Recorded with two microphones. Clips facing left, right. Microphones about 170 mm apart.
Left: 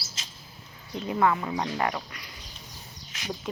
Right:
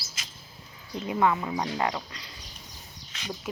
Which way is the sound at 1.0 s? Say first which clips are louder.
Even; 20° right (ahead or behind).